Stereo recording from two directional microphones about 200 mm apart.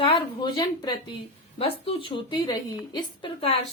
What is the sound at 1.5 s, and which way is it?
A woman's voice, 30° left (ahead or behind).